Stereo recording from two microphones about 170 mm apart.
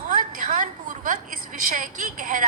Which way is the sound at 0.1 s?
50° right (ahead or behind).